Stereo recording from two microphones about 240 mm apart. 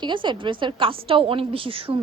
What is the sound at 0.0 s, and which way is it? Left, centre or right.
Speech, centre.